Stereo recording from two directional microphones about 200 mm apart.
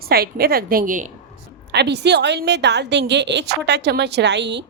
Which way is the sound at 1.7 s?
55° right (ahead or behind).